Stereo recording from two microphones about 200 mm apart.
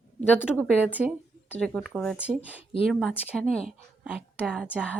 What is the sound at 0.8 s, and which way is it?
A woman's voice, 10° right (ahead or behind).